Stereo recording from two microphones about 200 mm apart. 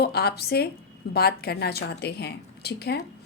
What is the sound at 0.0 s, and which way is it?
A woman's voice, 55° left (ahead or behind).